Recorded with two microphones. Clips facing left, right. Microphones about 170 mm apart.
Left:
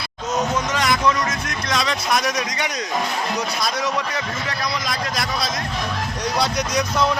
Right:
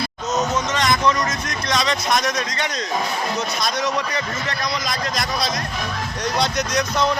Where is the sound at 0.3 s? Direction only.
10° left (ahead or behind).